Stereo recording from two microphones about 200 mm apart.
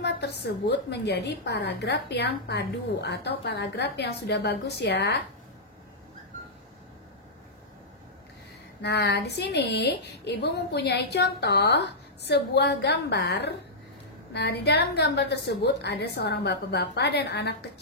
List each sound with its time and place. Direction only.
0.0 s a woman's voice: 55° left (ahead or behind)
8.8 s a woman's voice: 55° left (ahead or behind)